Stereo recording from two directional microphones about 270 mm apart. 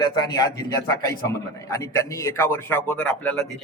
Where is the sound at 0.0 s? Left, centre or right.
Centre.